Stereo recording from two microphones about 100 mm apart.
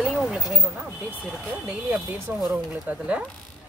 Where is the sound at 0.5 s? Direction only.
20° right (ahead or behind).